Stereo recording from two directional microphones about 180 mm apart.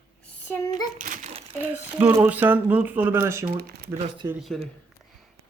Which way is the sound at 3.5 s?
60° right (ahead or behind).